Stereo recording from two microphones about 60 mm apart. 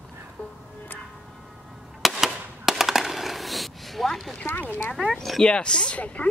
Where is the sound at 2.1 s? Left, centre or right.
Centre.